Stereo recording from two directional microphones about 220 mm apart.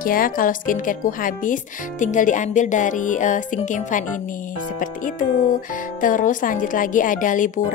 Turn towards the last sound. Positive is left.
turn(degrees=35)  # may be behind; listen again after turning